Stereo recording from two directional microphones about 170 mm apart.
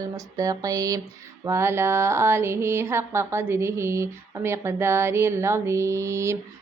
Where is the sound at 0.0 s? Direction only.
20° right (ahead or behind).